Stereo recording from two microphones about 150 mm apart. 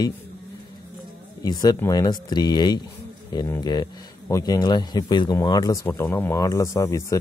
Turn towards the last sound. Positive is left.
turn(degrees=20)  # may be behind; listen again after turning